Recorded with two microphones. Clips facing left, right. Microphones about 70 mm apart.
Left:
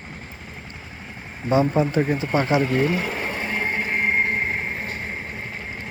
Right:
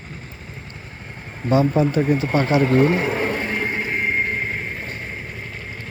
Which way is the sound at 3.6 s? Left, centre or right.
Left.